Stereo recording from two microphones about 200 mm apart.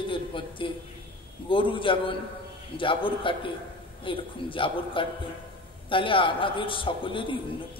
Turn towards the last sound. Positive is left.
turn(degrees=25)  # may be behind; listen again after turning